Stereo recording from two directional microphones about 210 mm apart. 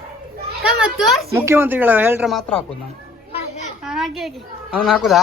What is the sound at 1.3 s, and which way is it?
A man's voice, 10° right (ahead or behind).